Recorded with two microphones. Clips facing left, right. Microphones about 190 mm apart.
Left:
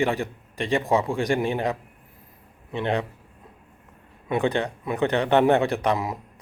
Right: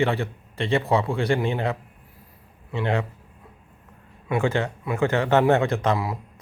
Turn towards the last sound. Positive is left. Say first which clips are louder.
# even
turn(degrees=15)  # may be behind; listen again after turning